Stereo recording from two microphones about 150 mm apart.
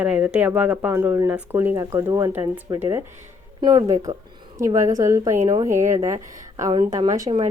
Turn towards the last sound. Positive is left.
turn(degrees=-25)  # may be behind; listen again after turning